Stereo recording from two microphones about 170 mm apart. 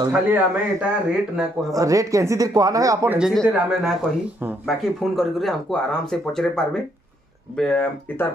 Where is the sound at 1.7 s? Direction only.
20° right (ahead or behind).